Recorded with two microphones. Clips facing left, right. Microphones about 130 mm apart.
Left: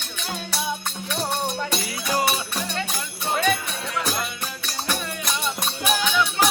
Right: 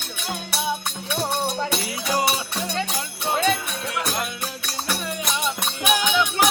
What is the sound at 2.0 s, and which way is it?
Music, 15° right (ahead or behind).